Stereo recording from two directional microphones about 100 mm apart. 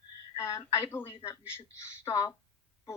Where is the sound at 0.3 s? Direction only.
30° left (ahead or behind).